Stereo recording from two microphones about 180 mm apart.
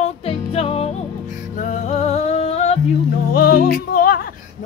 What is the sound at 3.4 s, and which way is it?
Music, 60° left (ahead or behind).